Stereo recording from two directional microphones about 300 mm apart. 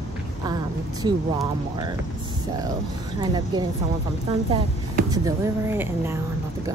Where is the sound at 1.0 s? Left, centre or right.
Centre.